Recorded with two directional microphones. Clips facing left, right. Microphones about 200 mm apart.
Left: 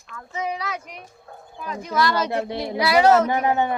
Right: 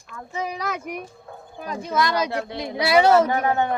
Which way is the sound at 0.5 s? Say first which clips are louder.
Right 3 dB; 50° right (ahead or behind).